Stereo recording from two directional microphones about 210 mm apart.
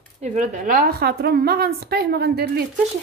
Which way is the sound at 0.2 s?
35° right (ahead or behind).